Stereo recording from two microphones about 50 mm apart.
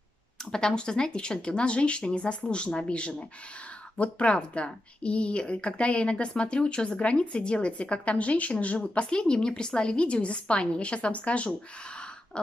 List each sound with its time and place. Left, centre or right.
0.5 s speech: centre